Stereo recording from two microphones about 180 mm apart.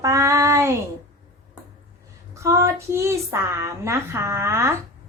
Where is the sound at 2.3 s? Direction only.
15° right (ahead or behind).